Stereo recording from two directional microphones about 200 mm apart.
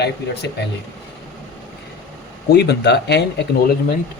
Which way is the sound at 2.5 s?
55° left (ahead or behind).